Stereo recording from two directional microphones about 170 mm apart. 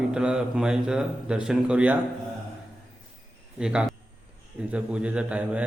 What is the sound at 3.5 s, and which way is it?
A man's voice, 5° right (ahead or behind).